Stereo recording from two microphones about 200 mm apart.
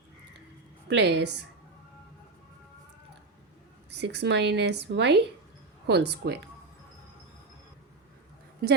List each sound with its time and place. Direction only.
0.9 s speech: 60° right (ahead or behind)
3.9 s speech: 60° right (ahead or behind)